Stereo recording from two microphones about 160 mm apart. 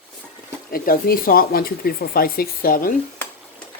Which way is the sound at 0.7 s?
65° left (ahead or behind).